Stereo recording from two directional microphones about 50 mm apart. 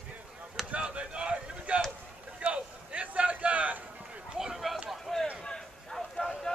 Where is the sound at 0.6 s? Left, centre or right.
Right.